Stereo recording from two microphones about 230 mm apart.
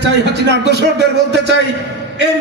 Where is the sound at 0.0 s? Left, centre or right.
Right.